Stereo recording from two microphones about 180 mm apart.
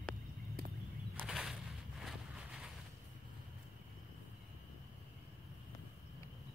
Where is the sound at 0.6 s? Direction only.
55° right (ahead or behind).